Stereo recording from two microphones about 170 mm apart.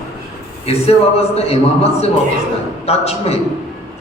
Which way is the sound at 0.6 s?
35° left (ahead or behind).